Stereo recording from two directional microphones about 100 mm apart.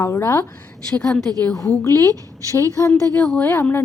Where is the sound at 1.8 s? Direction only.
30° left (ahead or behind).